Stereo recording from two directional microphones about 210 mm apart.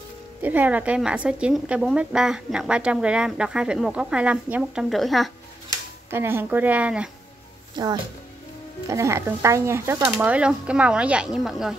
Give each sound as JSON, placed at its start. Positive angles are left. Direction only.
{"t": 0.4, "sound": "a woman's voice", "side_deg": -10}
{"t": 6.0, "sound": "speech", "side_deg": -10}
{"t": 7.7, "sound": "speech", "side_deg": -20}